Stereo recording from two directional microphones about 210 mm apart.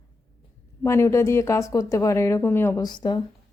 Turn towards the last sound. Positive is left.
turn(degrees=20)  # may be behind; listen again after turning